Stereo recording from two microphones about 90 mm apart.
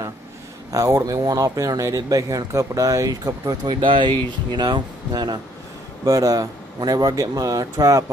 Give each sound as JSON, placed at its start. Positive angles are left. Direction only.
{"t": 0.7, "sound": "speech", "side_deg": -40}
{"t": 3.6, "sound": "speech", "side_deg": -60}
{"t": 6.0, "sound": "speech", "side_deg": -40}